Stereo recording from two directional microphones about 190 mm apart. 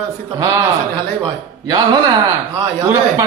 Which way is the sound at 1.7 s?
20° right (ahead or behind).